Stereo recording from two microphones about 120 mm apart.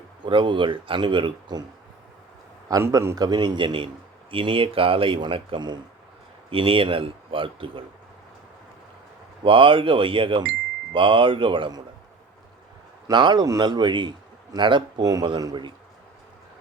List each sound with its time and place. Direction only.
0.3 s speech: 45° right (ahead or behind)
2.6 s a man's voice: 30° right (ahead or behind)
3.2 s a man's voice: 35° right (ahead or behind)
9.4 s speech: 45° right (ahead or behind)
13.1 s a man's voice: 40° right (ahead or behind)